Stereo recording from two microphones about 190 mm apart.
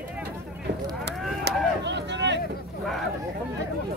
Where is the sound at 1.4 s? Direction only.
65° right (ahead or behind).